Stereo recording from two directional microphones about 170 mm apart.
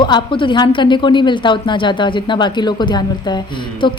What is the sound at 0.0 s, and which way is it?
A woman's voice, 30° left (ahead or behind).